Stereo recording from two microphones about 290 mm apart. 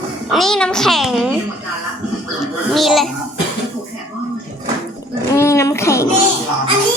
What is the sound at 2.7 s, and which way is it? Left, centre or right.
Speech, centre.